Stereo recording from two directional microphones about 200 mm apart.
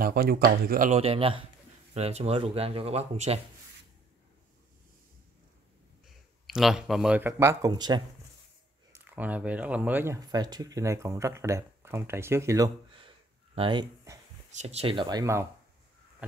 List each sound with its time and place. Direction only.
0.0 s speech: 50° right (ahead or behind); by 3.3 s 30° right (ahead or behind)
6.4 s speech: centre (ahead or behind); by 8.0 s 20° right (ahead or behind)
8.9 s speech: 10° right (ahead or behind)
14.5 s speech: 35° right (ahead or behind); by 15.4 s 15° right (ahead or behind)